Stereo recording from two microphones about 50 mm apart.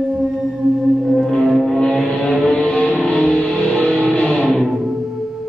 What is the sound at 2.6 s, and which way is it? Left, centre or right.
Music, left.